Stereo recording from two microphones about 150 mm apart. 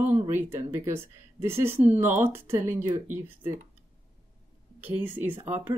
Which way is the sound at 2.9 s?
55° right (ahead or behind).